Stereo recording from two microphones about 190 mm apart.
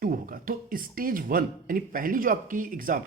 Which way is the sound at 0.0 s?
45° right (ahead or behind).